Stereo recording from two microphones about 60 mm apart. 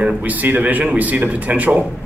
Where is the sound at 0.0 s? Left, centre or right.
Right.